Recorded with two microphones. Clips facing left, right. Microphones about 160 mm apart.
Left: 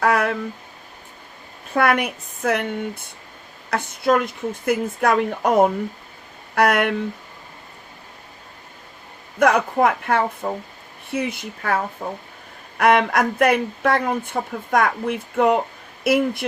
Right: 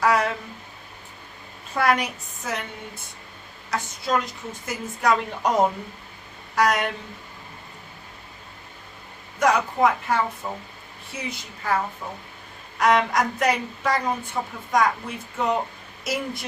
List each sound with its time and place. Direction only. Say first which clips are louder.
0.0 s a sound: left 2 dB; 55° left (ahead or behind)
1.7 s speech: left 3 dB; 55° left (ahead or behind)
9.4 s speech: left 3 dB; 55° left (ahead or behind)